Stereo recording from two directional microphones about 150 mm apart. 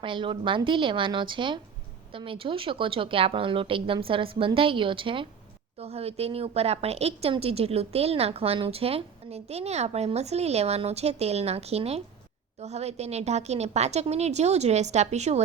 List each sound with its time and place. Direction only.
0.0 s a woman's voice: 35° right (ahead or behind)